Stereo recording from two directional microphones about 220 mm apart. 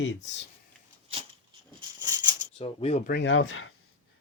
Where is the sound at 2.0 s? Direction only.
15° right (ahead or behind).